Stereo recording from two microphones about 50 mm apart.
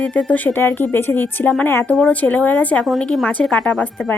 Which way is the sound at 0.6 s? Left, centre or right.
Left.